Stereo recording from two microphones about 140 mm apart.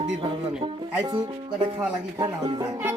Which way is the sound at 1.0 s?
35° right (ahead or behind).